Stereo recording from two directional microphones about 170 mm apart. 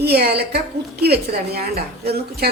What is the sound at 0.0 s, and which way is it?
A woman's voice, 70° right (ahead or behind).